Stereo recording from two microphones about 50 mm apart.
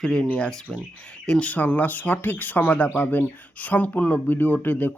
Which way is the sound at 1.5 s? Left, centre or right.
Left.